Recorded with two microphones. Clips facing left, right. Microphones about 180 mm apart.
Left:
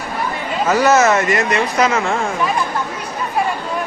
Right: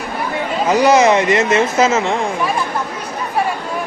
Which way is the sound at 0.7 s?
15° right (ahead or behind).